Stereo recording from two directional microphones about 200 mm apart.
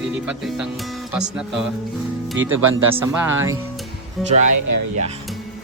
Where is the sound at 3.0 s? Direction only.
10° right (ahead or behind).